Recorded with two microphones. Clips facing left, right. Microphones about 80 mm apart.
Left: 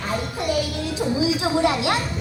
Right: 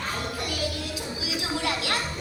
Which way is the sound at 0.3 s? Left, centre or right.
Left.